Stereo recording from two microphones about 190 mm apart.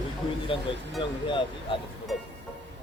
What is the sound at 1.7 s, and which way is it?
Speech, 30° left (ahead or behind).